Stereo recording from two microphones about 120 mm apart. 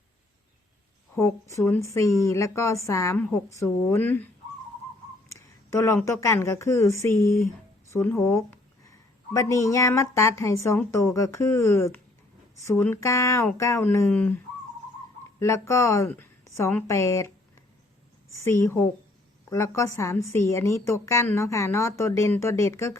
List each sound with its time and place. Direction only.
1.1 s speech: 25° left (ahead or behind)
5.7 s speech: 20° left (ahead or behind)
15.4 s speech: 25° left (ahead or behind)
18.3 s speech: 20° left (ahead or behind)